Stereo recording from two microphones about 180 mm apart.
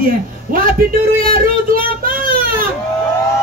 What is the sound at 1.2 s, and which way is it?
Speech, 50° right (ahead or behind).